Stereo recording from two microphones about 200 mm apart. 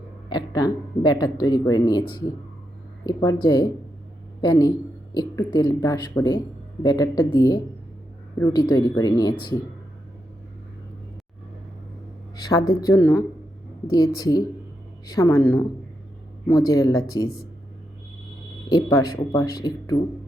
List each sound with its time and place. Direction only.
0.3 s speech: 20° left (ahead or behind)
3.1 s speech: 20° left (ahead or behind)
12.4 s a sound: 20° left (ahead or behind)
12.8 s speech: 15° left (ahead or behind)
18.7 s speech: 15° left (ahead or behind)